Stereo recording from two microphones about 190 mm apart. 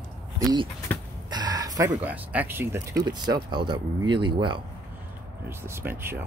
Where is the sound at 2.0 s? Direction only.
10° right (ahead or behind); by 4.6 s 25° right (ahead or behind).